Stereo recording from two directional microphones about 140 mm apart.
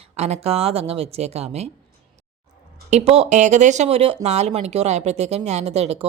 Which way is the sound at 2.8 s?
50° right (ahead or behind).